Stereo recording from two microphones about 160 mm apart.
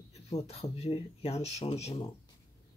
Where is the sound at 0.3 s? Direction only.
40° left (ahead or behind).